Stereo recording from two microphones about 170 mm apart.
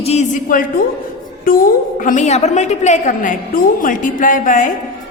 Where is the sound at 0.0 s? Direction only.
40° left (ahead or behind).